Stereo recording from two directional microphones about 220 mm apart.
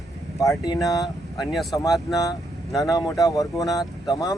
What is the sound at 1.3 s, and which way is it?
Speech, centre (ahead or behind).